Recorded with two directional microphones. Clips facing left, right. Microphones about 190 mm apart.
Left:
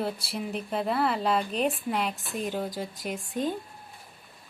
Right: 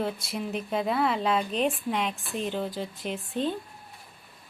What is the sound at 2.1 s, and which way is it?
Speech, 40° left (ahead or behind).